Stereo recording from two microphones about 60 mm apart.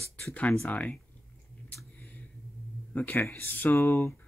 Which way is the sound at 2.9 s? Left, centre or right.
Left.